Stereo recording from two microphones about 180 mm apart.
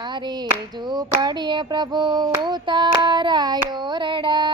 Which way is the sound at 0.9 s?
25° right (ahead or behind).